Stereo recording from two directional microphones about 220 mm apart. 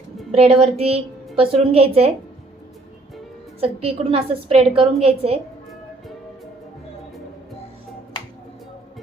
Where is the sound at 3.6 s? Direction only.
25° right (ahead or behind).